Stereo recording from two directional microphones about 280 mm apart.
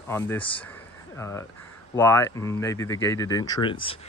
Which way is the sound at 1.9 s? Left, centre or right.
Centre.